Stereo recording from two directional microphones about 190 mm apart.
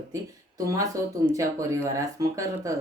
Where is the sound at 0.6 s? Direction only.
20° right (ahead or behind).